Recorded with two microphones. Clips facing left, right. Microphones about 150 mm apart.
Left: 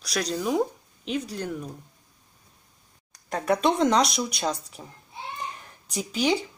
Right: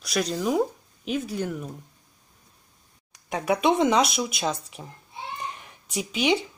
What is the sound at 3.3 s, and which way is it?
Speech, 5° right (ahead or behind).